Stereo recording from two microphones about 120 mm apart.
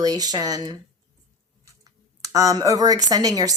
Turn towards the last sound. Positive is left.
turn(degrees=-30)  # may be behind; listen again after turning